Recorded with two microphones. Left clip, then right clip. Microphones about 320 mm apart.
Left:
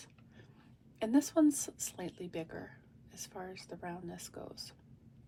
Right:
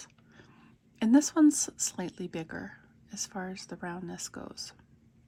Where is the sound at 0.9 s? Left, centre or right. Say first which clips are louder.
Right 5 dB; right.